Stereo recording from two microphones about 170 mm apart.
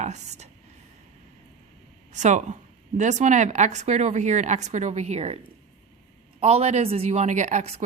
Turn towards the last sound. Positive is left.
turn(degrees=-40)  # may be behind; listen again after turning